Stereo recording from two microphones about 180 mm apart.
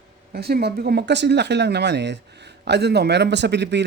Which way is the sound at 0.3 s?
60° right (ahead or behind).